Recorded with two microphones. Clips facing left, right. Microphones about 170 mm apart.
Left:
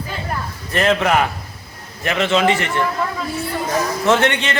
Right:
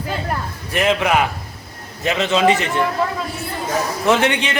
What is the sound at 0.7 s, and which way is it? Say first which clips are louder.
A man's voice: left 1 dB; 10° right (ahead or behind).